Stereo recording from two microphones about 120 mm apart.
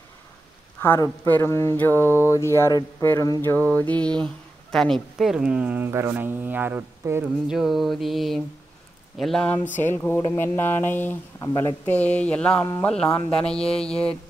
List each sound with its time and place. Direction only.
0.8 s speech: 20° left (ahead or behind)
3.4 s speech: 15° left (ahead or behind); by 7.2 s 20° right (ahead or behind)
7.4 s mantra: centre (ahead or behind)
9.8 s speech: 20° left (ahead or behind)
11.8 s speech: 10° left (ahead or behind)